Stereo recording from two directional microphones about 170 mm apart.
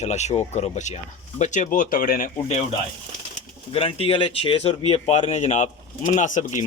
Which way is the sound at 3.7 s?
35° left (ahead or behind).